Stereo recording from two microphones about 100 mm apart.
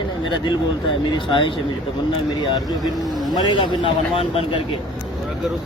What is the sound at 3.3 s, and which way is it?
Speech, 55° left (ahead or behind).